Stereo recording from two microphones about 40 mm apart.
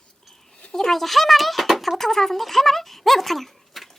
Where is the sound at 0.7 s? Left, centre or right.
Centre.